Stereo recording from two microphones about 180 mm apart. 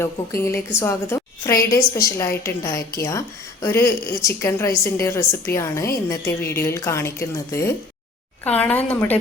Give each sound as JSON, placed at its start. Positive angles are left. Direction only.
{"t": 0.0, "sound": "a woman's voice", "side_deg": 15}